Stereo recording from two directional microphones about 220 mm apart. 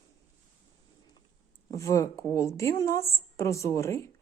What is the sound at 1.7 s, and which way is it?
A woman's voice, 15° left (ahead or behind).